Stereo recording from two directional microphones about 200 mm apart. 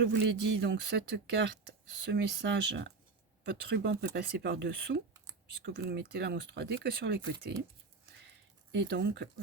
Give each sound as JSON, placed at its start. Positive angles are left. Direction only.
{"t": 0.0, "sound": "speech", "side_deg": -60}
{"t": 3.4, "sound": "speech", "side_deg": -50}
{"t": 8.7, "sound": "speech", "side_deg": -60}